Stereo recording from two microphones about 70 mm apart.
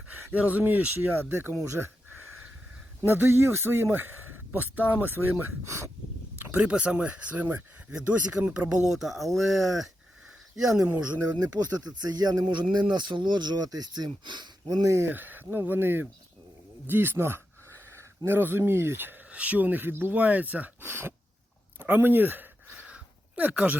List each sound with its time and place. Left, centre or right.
0.3 s speech: right
3.1 s speech: right
4.9 s speech: right
5.4 s speech: right
6.6 s speech: centre
8.9 s speech: centre
10.8 s speech: centre
11.5 s speech: right
14.8 s speech: right
15.1 s speech: right
16.8 s a sound: right
18.3 s speech: right
21.8 s a sound: right